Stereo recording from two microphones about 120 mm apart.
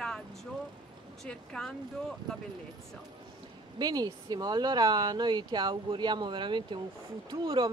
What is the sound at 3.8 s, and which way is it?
Speech, 35° right (ahead or behind).